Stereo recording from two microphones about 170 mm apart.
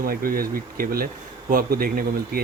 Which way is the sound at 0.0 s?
60° right (ahead or behind).